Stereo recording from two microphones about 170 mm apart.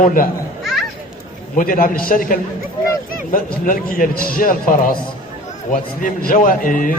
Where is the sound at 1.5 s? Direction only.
55° left (ahead or behind).